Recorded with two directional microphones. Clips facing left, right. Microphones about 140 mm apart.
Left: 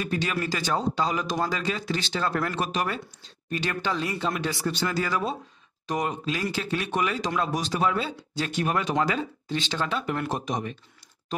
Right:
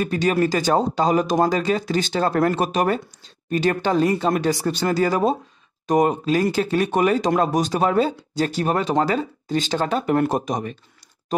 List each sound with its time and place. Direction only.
0.0 s speech: 45° right (ahead or behind)